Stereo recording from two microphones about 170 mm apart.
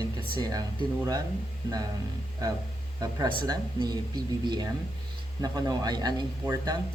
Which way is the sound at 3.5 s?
25° right (ahead or behind).